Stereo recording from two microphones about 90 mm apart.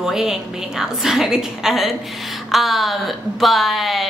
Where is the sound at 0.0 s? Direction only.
5° right (ahead or behind).